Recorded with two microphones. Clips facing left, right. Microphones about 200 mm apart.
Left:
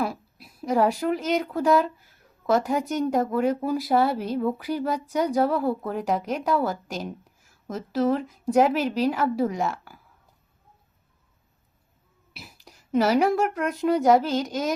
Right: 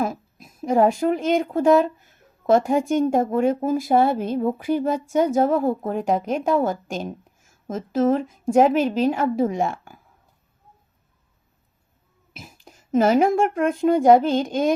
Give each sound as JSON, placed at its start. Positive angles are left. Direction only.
{"t": 0.0, "sound": "a sound", "side_deg": -45}
{"t": 0.6, "sound": "speech", "side_deg": -25}
{"t": 3.6, "sound": "speech", "side_deg": -45}
{"t": 3.8, "sound": "speech", "side_deg": -25}
{"t": 12.7, "sound": "a sound", "side_deg": -25}
{"t": 13.1, "sound": "speech", "side_deg": -25}